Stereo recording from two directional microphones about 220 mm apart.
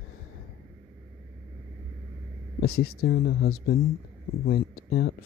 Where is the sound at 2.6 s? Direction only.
45° left (ahead or behind).